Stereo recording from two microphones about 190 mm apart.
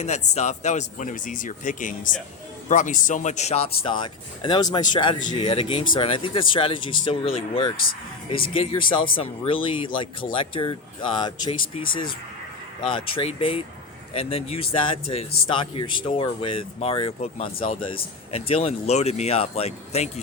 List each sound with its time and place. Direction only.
0.3 s a man's voice: 35° left (ahead or behind)
12.8 s speech: 25° left (ahead or behind)